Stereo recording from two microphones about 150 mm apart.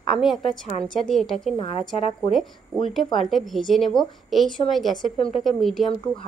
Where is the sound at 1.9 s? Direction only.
40° left (ahead or behind).